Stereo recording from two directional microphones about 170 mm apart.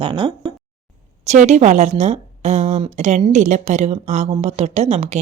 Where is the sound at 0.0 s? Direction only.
30° right (ahead or behind).